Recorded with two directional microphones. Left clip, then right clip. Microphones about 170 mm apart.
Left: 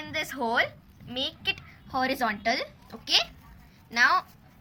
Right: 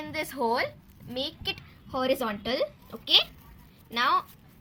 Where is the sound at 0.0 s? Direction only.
20° right (ahead or behind).